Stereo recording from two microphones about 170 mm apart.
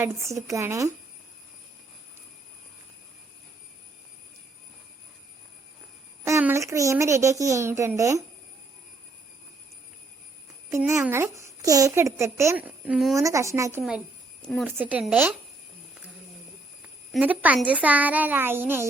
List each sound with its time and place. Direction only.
0.0 s speech: 15° right (ahead or behind)
6.2 s speech: 15° right (ahead or behind)
10.7 s speech: 15° right (ahead or behind)
13.1 s speech: 20° right (ahead or behind)
14.8 s speech: 10° right (ahead or behind)
17.1 s speech: 10° right (ahead or behind)